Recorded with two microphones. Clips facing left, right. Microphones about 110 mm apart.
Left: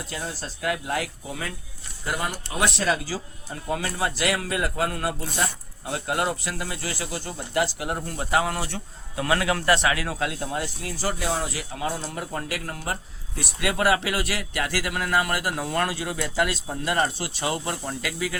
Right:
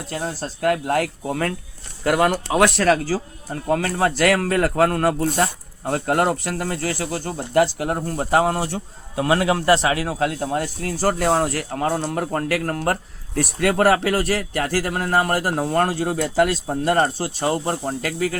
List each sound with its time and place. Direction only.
0.1 s speech: 45° right (ahead or behind)
2.0 s speech: 75° right (ahead or behind); by 18.3 s 45° right (ahead or behind)